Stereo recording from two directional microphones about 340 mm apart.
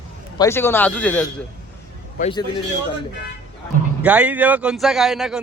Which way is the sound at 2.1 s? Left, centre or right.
Centre.